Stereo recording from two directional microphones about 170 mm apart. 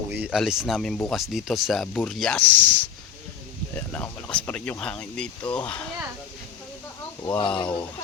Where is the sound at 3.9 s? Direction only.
10° left (ahead or behind).